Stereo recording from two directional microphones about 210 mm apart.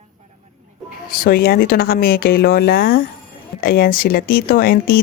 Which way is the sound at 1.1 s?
45° left (ahead or behind).